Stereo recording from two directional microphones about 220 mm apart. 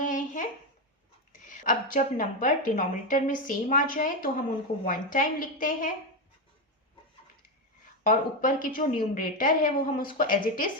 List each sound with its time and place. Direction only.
0.0 s a sound: 35° left (ahead or behind)
1.3 s a woman's voice: 40° left (ahead or behind)
8.0 s a woman's voice: 35° left (ahead or behind)